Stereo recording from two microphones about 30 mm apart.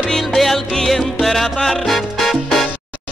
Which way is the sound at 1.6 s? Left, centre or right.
Centre.